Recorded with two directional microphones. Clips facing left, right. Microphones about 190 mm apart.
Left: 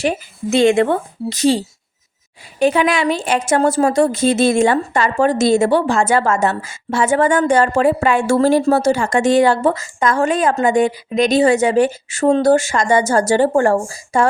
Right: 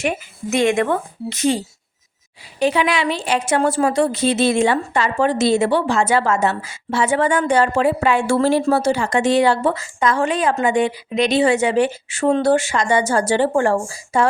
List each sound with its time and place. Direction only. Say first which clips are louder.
0.0 s speech: left 3 dB; 30° left (ahead or behind)
2.6 s a woman's voice: left 3 dB; 50° left (ahead or behind)